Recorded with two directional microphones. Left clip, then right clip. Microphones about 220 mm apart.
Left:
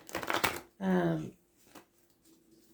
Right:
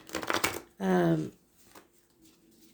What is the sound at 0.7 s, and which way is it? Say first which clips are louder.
Speech: right 8 dB; 45° right (ahead or behind).